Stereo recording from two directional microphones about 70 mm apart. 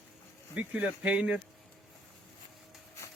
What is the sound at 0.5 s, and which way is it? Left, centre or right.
Speech, centre.